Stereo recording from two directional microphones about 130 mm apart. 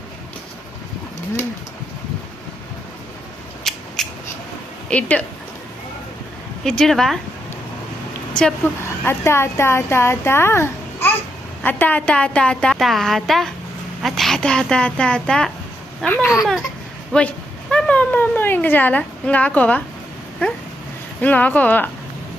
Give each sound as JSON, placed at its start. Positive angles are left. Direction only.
{"t": 3.6, "sound": "a sound", "side_deg": 5}
{"t": 4.9, "sound": "a woman's voice", "side_deg": 10}
{"t": 6.7, "sound": "a woman's voice", "side_deg": 5}
{"t": 8.4, "sound": "a woman's voice", "side_deg": 5}
{"t": 9.0, "sound": "a woman's voice", "side_deg": 20}
{"t": 16.0, "sound": "a woman's voice", "side_deg": 15}
{"t": 16.4, "sound": "a woman's voice", "side_deg": -5}
{"t": 21.2, "sound": "a woman's voice", "side_deg": 10}